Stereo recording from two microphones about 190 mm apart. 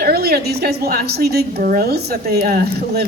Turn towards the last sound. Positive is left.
turn(degrees=-60)  # may be behind; listen again after turning